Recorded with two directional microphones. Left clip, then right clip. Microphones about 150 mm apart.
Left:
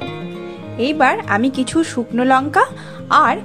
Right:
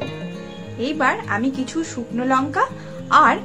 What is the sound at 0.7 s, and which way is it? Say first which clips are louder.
A woman's voice: left 5 dB; 45° left (ahead or behind).